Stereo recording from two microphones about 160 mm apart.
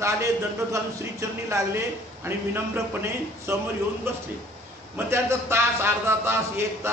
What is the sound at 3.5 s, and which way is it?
A man's voice, 15° right (ahead or behind).